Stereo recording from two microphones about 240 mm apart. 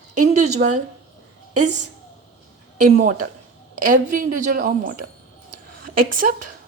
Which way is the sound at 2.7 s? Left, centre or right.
Right.